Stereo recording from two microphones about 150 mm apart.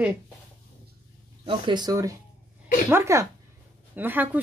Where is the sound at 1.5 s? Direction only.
30° right (ahead or behind).